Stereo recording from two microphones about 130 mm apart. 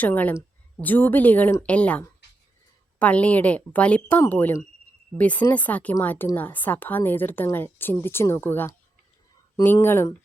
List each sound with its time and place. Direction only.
0.0 s speech: 15° left (ahead or behind)
9.7 s speech: 20° left (ahead or behind)